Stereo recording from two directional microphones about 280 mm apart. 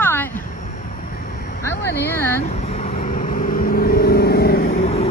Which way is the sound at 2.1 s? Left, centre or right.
Centre.